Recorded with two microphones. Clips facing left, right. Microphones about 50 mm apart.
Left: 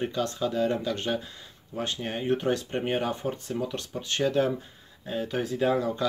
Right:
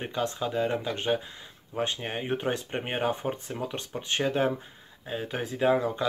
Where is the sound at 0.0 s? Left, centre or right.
Right.